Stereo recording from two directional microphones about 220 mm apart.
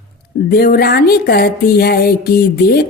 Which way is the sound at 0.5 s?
45° left (ahead or behind).